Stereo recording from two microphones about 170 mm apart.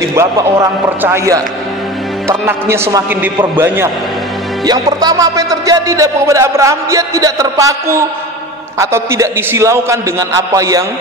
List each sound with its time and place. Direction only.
0.1 s a man's voice: 20° right (ahead or behind)
4.6 s a man's voice: 25° right (ahead or behind)